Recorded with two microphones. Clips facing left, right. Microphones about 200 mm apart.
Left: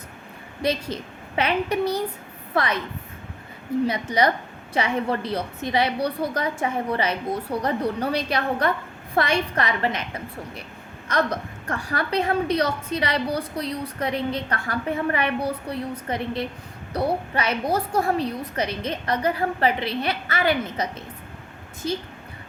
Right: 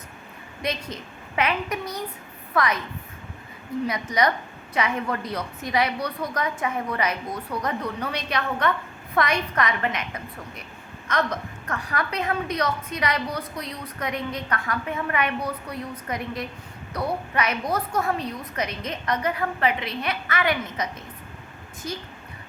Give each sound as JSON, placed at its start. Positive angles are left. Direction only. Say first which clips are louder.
{"t": 0.6, "sound": "a woman's voice", "louder": "left 5 dB", "side_deg": 30}
{"t": 3.8, "sound": "a woman's voice", "louder": "left 1 dB", "side_deg": 30}